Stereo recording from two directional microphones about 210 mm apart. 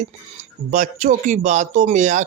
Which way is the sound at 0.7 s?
35° right (ahead or behind).